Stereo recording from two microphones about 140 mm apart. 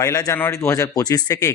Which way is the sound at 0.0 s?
25° left (ahead or behind).